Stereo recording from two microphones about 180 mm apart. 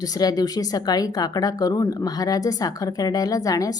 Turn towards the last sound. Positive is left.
turn(degrees=20)  # may be behind; listen again after turning